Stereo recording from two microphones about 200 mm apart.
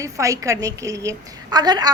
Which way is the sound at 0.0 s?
15° right (ahead or behind).